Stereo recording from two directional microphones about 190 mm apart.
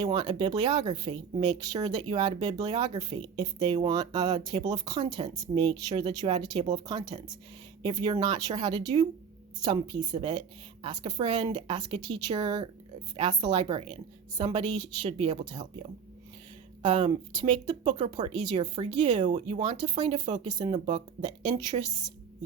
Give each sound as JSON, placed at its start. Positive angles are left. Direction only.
{"t": 0.0, "sound": "speech", "side_deg": -20}
{"t": 16.8, "sound": "speech", "side_deg": -25}